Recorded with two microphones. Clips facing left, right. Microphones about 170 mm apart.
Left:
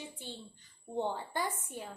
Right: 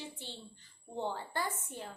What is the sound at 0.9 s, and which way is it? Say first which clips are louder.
Child singing: left 2 dB; 15° left (ahead or behind).